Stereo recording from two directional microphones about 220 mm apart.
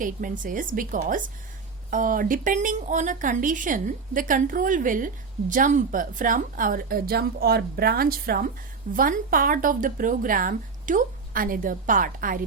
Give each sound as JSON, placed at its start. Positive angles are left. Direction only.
{"t": 0.0, "sound": "speech", "side_deg": -35}